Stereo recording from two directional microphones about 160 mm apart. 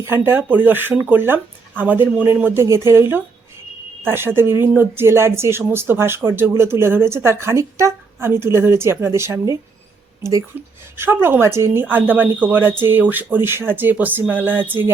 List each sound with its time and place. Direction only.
0.0 s speech: 15° right (ahead or behind)
4.0 s a woman's voice: 15° right (ahead or behind)
10.9 s speech: 15° right (ahead or behind)